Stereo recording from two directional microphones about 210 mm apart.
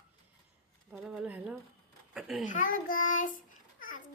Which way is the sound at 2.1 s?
Centre (ahead or behind).